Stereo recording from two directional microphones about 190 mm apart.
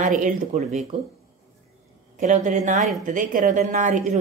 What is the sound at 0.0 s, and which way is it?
Speech, 45° right (ahead or behind).